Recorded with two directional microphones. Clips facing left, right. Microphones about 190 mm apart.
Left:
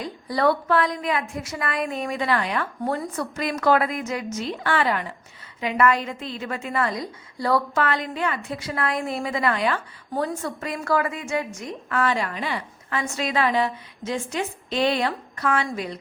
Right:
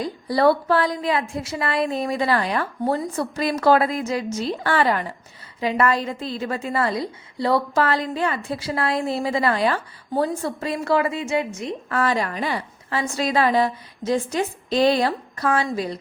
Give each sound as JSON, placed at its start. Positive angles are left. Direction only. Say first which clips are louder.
{"t": 0.0, "sound": "a woman's voice", "louder": "right 4 dB", "side_deg": -35}
{"t": 11.9, "sound": "a woman's voice", "louder": "right 1 dB", "side_deg": -35}